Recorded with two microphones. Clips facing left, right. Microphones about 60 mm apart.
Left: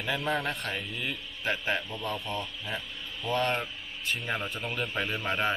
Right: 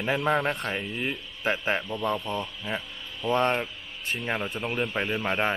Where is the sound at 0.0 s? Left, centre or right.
Right.